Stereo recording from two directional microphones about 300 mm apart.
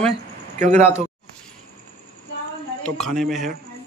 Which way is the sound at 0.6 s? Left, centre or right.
Right.